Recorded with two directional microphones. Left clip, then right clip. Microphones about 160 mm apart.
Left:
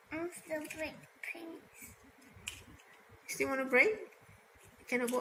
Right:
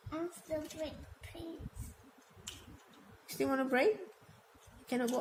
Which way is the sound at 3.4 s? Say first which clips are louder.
Left 3 dB; 75° right (ahead or behind).